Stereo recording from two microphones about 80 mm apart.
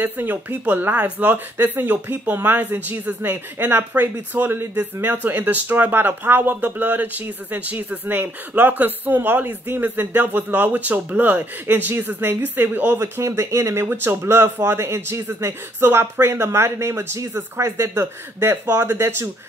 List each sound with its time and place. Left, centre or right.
0.0 s speech: right